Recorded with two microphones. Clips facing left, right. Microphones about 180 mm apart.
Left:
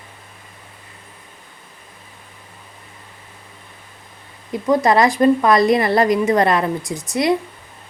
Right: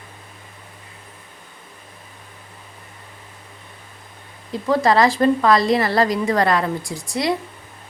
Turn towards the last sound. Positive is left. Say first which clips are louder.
# left 4 dB
turn(degrees=20)  # may be behind; listen again after turning